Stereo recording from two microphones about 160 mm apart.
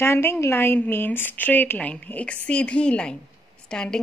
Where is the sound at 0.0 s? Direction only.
15° left (ahead or behind).